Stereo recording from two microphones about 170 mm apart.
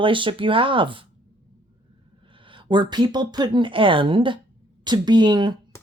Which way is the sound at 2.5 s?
30° right (ahead or behind).